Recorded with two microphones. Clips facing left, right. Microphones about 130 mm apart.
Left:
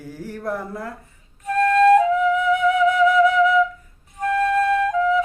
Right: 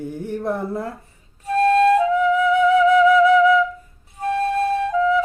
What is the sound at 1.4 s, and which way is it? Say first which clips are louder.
Flute: right 1 dB; 30° right (ahead or behind).